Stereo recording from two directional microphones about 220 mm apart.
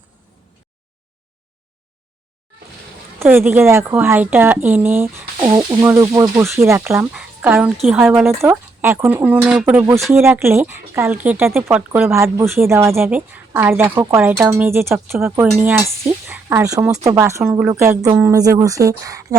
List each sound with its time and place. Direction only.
3.2 s speech: 10° right (ahead or behind)
5.4 s speech: 20° right (ahead or behind)